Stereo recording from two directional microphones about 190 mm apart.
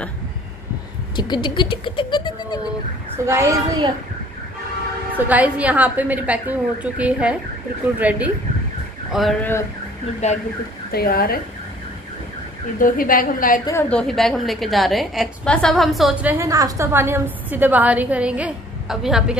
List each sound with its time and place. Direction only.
1.1 s speech: 25° left (ahead or behind)
3.3 s a woman's voice: 15° right (ahead or behind)
5.1 s a woman's voice: 10° right (ahead or behind)
9.4 s a sound: 15° left (ahead or behind)
10.2 s speech: 35° left (ahead or behind)
10.9 s a woman's voice: 55° left (ahead or behind)
12.7 s a woman's voice: 45° left (ahead or behind)
13.7 s a woman's voice: 10° left (ahead or behind)